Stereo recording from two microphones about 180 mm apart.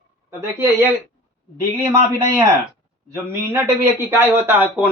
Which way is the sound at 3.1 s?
15° right (ahead or behind).